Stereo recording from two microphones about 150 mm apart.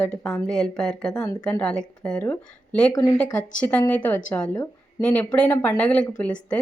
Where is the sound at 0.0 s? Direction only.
5° left (ahead or behind).